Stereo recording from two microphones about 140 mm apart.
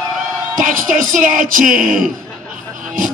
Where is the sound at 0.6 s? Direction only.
75° right (ahead or behind).